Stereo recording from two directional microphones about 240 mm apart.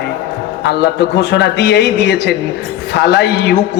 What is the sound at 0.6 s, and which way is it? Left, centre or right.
A man's voice, left.